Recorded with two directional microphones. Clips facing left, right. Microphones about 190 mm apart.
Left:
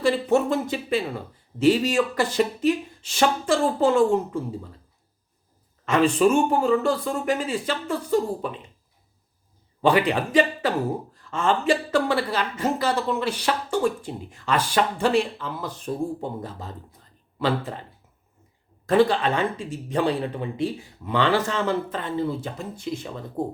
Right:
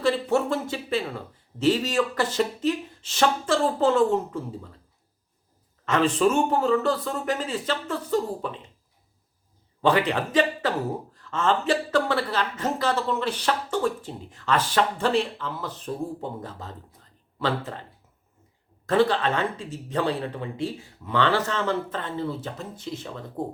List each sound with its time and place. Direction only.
0.0 s speech: 15° left (ahead or behind)
5.8 s speech: 10° left (ahead or behind)
9.8 s speech: 10° left (ahead or behind)
18.9 s speech: 15° left (ahead or behind)